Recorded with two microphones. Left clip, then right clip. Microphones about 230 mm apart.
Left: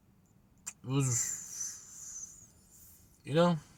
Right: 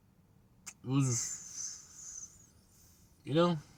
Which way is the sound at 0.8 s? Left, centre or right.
Centre.